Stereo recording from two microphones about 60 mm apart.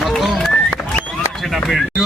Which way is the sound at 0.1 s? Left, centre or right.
Centre.